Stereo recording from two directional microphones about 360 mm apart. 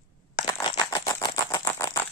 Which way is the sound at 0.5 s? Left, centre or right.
Centre.